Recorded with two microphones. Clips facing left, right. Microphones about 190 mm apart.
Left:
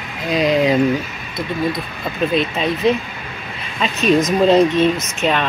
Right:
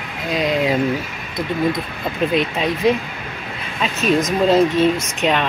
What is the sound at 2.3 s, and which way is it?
Speech, 15° right (ahead or behind).